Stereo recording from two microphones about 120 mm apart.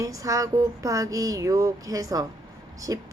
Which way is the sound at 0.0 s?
30° right (ahead or behind).